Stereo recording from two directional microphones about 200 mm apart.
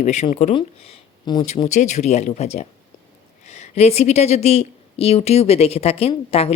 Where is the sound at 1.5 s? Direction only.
35° left (ahead or behind).